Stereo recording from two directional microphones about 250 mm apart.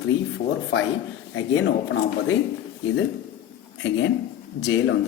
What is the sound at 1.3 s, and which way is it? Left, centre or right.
Speech, left.